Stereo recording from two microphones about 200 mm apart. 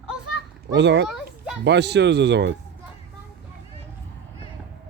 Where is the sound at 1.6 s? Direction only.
60° right (ahead or behind).